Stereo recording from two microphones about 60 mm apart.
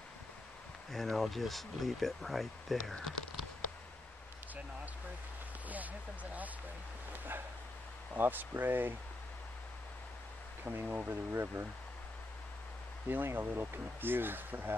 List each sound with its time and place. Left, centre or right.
0.9 s speech: centre
5.7 s speech: right
10.6 s speech: right
13.1 s speech: right